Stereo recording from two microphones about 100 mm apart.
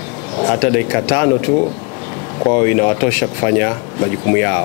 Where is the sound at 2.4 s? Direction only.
15° left (ahead or behind).